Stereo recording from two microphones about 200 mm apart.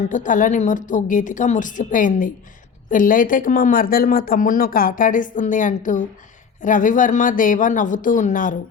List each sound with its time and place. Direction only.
0.1 s a woman's voice: 40° left (ahead or behind)